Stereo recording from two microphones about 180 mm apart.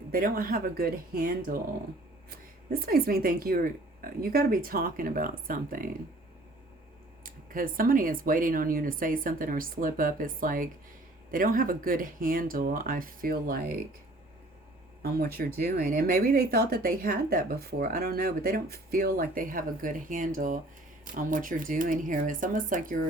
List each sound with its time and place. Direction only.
0.1 s speech: 55° right (ahead or behind)
7.3 s speech: 50° right (ahead or behind)
15.0 s speech: 60° right (ahead or behind)